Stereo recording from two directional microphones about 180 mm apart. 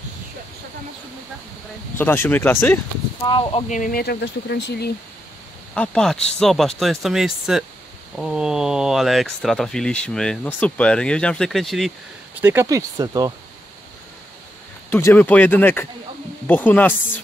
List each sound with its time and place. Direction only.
2.0 s speech: 10° left (ahead or behind)
3.3 s speech: 30° left (ahead or behind)
3.6 s speech: 45° left (ahead or behind); by 4.9 s 65° left (ahead or behind)
5.8 s speech: centre (ahead or behind)
12.4 s speech: 10° right (ahead or behind)
14.9 s speech: 15° left (ahead or behind)